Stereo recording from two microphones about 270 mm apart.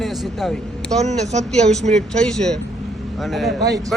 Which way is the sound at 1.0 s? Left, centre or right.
Right.